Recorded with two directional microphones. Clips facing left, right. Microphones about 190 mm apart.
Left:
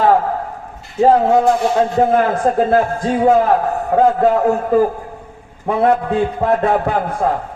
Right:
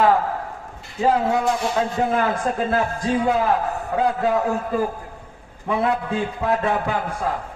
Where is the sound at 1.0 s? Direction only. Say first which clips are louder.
Left 7 dB; 45° left (ahead or behind).